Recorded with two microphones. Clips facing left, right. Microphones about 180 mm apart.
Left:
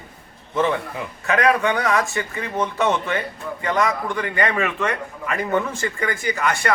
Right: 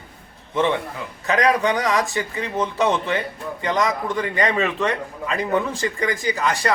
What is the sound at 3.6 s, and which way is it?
Speech, 20° right (ahead or behind).